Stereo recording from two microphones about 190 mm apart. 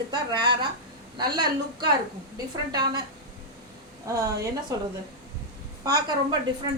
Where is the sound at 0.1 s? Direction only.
25° right (ahead or behind).